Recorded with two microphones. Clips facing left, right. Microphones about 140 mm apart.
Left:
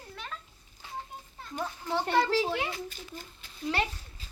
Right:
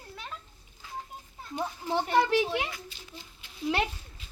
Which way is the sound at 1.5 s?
20° right (ahead or behind).